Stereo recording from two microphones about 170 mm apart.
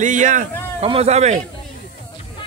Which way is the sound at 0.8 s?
35° right (ahead or behind).